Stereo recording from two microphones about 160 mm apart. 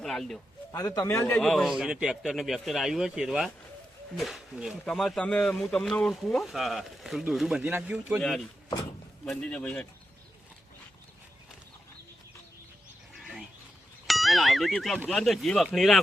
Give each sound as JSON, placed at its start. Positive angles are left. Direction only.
{"t": 0.0, "sound": "speech", "side_deg": 0}
{"t": 0.7, "sound": "a man's voice", "side_deg": 20}
{"t": 1.4, "sound": "speech", "side_deg": 0}
{"t": 9.2, "sound": "speech", "side_deg": 5}
{"t": 13.1, "sound": "a sound", "side_deg": 0}
{"t": 14.1, "sound": "speech", "side_deg": 0}